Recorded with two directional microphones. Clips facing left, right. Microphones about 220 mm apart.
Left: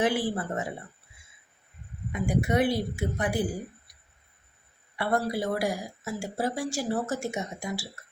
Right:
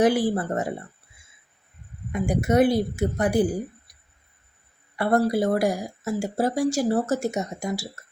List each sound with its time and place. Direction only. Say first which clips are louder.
0.0 s speech: right 6 dB; 40° right (ahead or behind)
2.1 s a woman's voice: right 5 dB; 45° right (ahead or behind)
4.9 s speech: right 7 dB; 45° right (ahead or behind)